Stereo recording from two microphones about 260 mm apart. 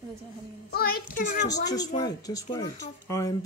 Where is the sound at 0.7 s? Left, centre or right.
Left.